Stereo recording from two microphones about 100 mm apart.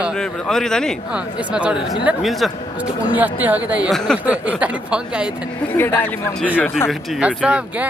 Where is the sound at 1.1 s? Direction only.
10° right (ahead or behind).